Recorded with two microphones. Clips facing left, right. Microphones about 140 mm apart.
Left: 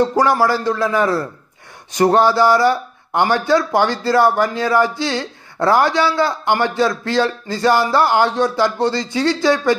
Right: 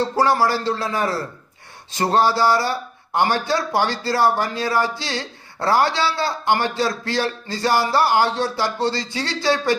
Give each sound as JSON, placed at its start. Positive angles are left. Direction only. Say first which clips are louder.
{"t": 0.0, "sound": "a man's voice", "louder": "left 3 dB", "side_deg": 20}